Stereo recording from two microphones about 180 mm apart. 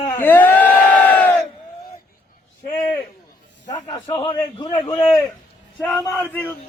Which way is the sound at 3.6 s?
20° left (ahead or behind).